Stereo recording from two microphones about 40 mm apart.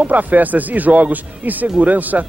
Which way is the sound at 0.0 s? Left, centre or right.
Right.